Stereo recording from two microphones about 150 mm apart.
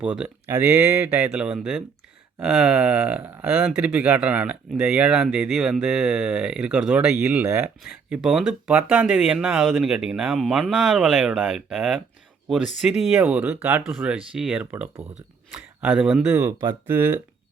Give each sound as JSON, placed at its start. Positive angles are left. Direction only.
{"t": 0.0, "sound": "speech", "side_deg": -10}
{"t": 16.2, "sound": "speech", "side_deg": -15}